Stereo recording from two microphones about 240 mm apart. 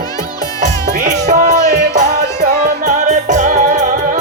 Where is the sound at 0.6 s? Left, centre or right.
Right.